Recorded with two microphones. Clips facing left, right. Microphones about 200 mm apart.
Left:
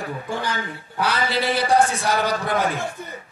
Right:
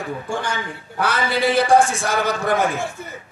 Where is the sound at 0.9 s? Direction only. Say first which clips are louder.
Right 2 dB; 50° right (ahead or behind).